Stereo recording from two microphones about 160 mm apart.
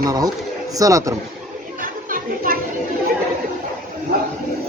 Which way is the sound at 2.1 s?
60° right (ahead or behind).